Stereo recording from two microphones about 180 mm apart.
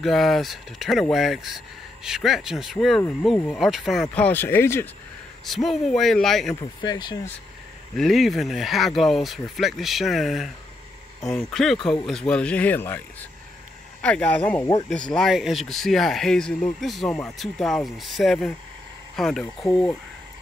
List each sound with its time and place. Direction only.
0.0 s speech: centre (ahead or behind)
5.4 s speech: centre (ahead or behind)
6.6 s speech: 25° left (ahead or behind)
8.0 s speech: centre (ahead or behind)
11.1 s speech: 15° left (ahead or behind)
11.5 s speech: centre (ahead or behind)